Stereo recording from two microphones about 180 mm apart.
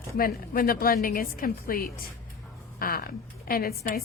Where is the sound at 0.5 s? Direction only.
55° left (ahead or behind).